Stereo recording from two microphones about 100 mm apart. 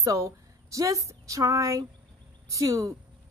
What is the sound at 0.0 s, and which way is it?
A woman's voice, 35° right (ahead or behind).